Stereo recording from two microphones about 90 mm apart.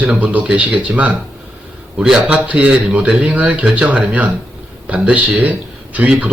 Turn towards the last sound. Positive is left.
turn(degrees=-15)  # may be behind; listen again after turning